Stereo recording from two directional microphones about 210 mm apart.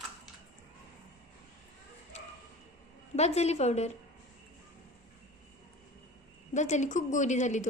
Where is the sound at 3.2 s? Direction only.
30° left (ahead or behind).